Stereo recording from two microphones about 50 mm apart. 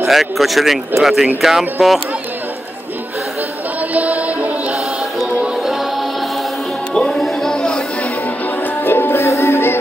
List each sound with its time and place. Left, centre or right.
0.0 s speech: centre
3.9 s music: right
5.4 s music: centre
7.1 s music: centre
8.8 s music: left
9.1 s music: left
9.5 s music: left